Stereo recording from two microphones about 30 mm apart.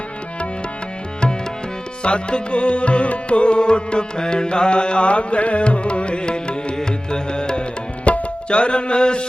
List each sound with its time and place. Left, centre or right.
2.0 s music: left
8.1 s tabla: left
8.4 s music: left